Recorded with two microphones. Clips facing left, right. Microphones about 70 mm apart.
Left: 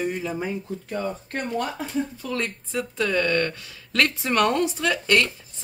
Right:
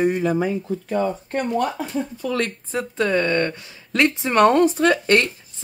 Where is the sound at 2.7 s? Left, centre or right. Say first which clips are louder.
Right 3 dB; right.